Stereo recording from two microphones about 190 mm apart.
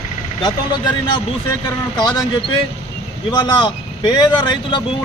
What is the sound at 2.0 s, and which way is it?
Speech, 20° left (ahead or behind).